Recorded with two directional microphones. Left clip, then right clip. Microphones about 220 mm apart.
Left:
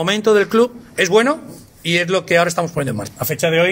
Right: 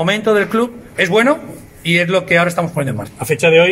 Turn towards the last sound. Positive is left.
turn(degrees=55)  # may be behind; listen again after turning